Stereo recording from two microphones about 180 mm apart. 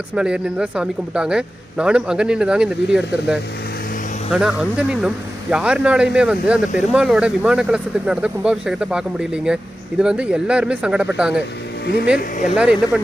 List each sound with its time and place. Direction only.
0.1 s speech: 5° right (ahead or behind)
12.5 s speech: 5° right (ahead or behind)